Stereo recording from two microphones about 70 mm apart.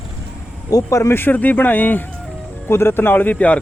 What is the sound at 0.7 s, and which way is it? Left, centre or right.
Speech, left.